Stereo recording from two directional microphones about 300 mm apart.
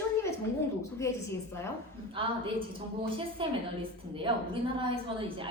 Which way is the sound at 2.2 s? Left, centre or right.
Centre.